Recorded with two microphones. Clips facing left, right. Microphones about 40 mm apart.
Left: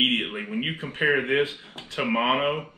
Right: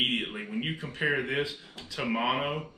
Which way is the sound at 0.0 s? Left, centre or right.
Left.